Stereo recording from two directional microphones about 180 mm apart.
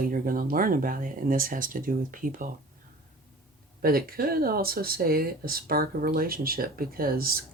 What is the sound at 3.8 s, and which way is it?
Speech, 55° right (ahead or behind).